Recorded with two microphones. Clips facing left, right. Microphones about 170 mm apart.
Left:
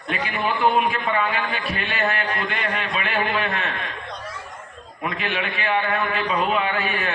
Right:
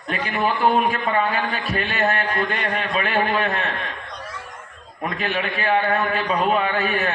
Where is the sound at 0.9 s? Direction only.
40° right (ahead or behind).